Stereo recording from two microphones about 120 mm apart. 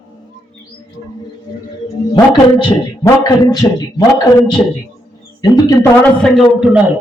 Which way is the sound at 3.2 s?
35° left (ahead or behind).